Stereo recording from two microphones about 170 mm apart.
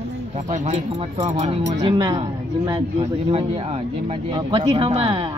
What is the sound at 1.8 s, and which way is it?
Speech, 25° right (ahead or behind).